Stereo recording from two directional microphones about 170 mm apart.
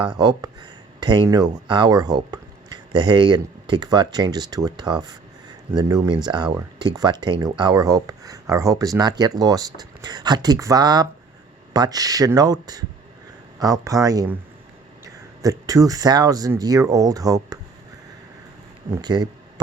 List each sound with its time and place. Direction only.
0.0 s speech: 25° right (ahead or behind)
19.0 s speech: 25° right (ahead or behind)